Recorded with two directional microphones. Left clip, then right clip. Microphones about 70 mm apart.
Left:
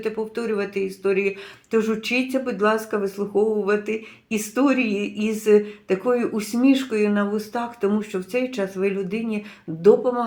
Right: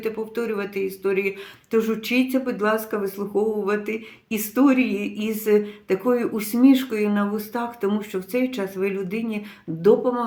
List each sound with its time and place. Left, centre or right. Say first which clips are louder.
0.0 s speech: even; right